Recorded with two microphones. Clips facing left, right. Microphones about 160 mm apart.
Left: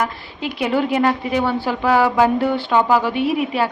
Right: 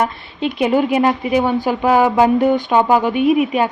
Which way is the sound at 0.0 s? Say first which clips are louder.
Right 4 dB; 20° right (ahead or behind).